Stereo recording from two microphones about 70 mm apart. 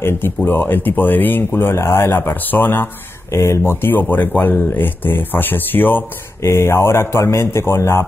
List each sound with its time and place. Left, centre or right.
0.5 s speech: left
3.3 s speech: left